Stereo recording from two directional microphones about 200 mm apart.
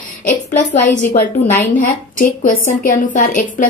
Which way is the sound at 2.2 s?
45° left (ahead or behind).